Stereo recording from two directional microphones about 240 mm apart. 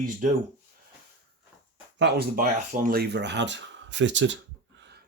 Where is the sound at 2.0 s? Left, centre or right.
Right.